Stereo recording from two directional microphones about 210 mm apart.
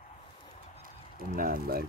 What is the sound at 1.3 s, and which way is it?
Speech, 45° right (ahead or behind).